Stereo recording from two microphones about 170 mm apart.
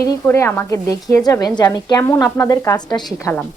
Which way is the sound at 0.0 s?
20° left (ahead or behind).